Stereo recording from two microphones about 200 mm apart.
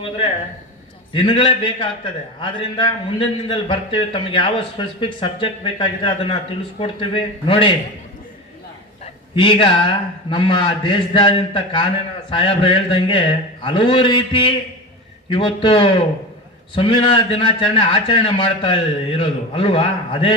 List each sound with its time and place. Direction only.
1.1 s a man's voice: 25° left (ahead or behind)
9.3 s a man's voice: 25° left (ahead or behind)